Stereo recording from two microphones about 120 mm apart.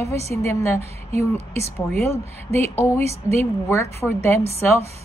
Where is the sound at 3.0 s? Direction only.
60° right (ahead or behind).